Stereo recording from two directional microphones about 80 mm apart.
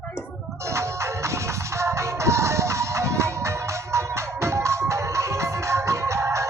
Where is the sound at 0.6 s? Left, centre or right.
Right.